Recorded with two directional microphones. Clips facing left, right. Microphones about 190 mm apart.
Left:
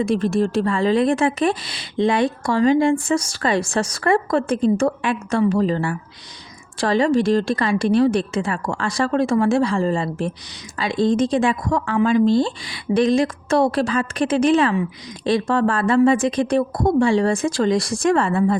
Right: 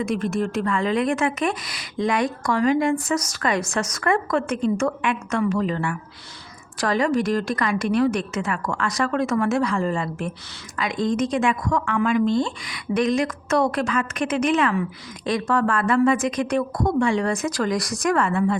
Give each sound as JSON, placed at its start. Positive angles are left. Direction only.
{"t": 0.0, "sound": "a woman's voice", "side_deg": 30}